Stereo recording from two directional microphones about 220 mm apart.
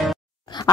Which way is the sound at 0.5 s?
20° left (ahead or behind).